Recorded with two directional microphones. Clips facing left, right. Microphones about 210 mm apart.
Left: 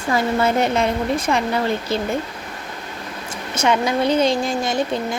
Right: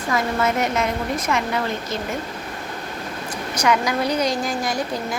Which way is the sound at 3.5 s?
25° left (ahead or behind).